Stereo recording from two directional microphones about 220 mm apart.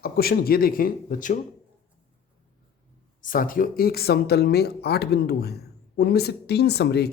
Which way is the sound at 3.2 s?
40° left (ahead or behind).